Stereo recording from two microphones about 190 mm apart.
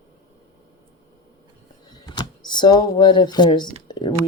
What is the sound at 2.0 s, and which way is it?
Speech, 20° left (ahead or behind).